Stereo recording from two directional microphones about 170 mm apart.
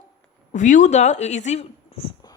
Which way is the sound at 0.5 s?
45° left (ahead or behind).